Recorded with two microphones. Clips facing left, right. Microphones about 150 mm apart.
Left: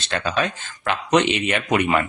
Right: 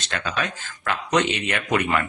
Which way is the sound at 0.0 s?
30° left (ahead or behind).